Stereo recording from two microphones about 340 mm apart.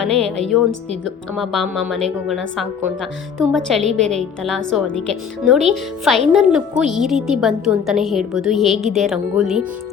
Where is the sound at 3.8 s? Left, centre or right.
Centre.